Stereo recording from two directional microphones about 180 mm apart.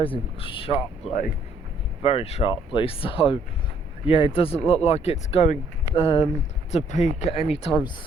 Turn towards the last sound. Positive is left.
turn(degrees=30)  # may be behind; listen again after turning